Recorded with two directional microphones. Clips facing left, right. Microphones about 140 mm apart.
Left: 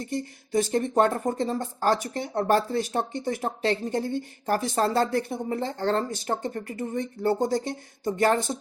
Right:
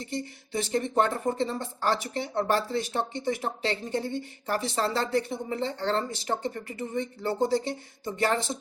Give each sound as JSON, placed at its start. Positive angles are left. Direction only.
{"t": 0.0, "sound": "speech", "side_deg": 45}